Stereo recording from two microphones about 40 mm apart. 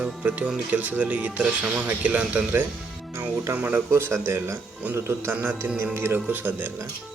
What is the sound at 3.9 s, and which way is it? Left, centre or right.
Speech, right.